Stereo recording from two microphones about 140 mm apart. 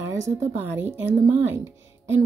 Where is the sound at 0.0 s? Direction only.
20° right (ahead or behind).